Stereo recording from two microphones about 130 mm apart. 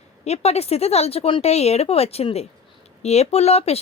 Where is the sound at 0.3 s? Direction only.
55° left (ahead or behind).